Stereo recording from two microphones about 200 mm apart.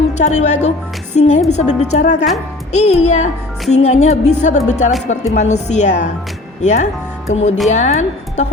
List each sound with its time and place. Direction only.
0.1 s a woman's voice: 35° left (ahead or behind)